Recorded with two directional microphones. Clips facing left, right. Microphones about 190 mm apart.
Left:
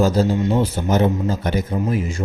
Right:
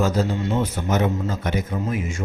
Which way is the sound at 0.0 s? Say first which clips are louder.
Left 4 dB; 35° left (ahead or behind).